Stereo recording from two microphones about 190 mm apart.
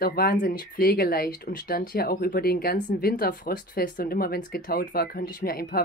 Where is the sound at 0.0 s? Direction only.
50° left (ahead or behind).